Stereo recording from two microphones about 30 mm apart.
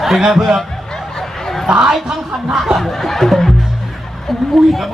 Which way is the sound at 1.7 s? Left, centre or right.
Right.